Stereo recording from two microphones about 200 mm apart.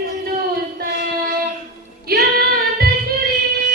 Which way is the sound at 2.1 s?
50° right (ahead or behind).